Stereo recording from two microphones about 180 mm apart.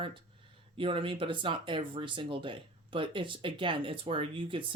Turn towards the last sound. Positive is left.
turn(degrees=-30)  # may be behind; listen again after turning